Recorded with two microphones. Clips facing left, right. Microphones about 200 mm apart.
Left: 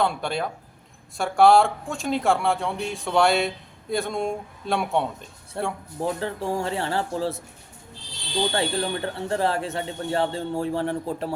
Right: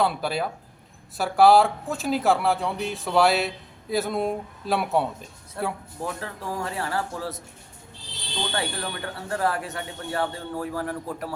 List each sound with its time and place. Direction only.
0.0 s speech: 5° right (ahead or behind)
5.6 s a man's voice: 30° left (ahead or behind)
8.5 s a man's voice: 30° left (ahead or behind)